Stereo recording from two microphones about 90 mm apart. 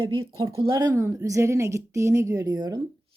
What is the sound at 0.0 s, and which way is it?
Speech, 50° right (ahead or behind).